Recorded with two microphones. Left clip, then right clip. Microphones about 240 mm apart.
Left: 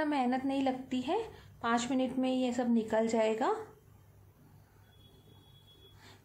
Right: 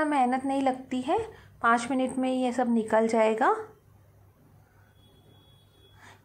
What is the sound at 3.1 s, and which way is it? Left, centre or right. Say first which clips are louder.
Speech: right 7 dB; centre.